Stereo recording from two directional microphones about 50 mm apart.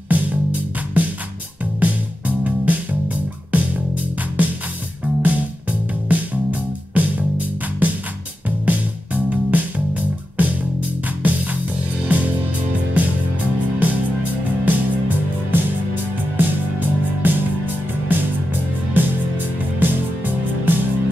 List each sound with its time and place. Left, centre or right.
0.1 s music: right
13.7 s music: right